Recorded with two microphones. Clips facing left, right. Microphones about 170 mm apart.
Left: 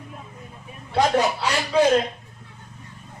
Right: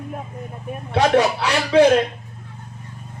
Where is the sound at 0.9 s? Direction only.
70° right (ahead or behind).